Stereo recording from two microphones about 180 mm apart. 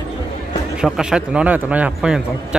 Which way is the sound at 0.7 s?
5° right (ahead or behind).